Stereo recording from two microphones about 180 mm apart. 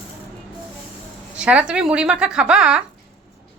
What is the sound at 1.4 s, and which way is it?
A woman's voice, 5° right (ahead or behind).